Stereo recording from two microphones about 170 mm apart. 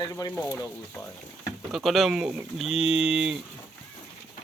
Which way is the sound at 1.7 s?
Centre (ahead or behind).